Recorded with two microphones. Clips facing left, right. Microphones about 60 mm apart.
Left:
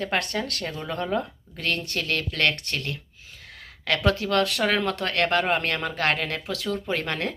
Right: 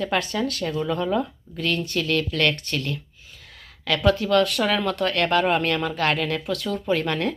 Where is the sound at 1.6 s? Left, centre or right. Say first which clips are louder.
Right 3 dB; left.